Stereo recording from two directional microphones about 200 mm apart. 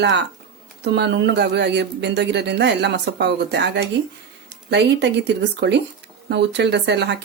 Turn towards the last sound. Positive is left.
turn(degrees=-55)  # may be behind; listen again after turning